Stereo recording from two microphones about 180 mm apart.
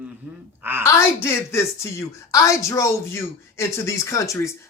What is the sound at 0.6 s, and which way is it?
Speech, 10° right (ahead or behind).